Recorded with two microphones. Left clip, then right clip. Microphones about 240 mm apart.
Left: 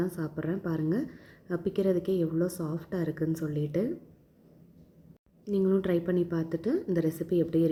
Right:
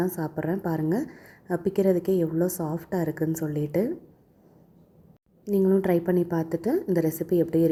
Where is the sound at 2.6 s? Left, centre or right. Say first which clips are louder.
Right 5 dB; right.